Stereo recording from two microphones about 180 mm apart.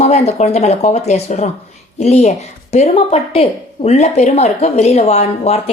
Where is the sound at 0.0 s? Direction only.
35° left (ahead or behind).